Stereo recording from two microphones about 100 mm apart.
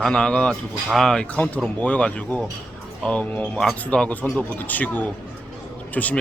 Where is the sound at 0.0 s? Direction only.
10° left (ahead or behind).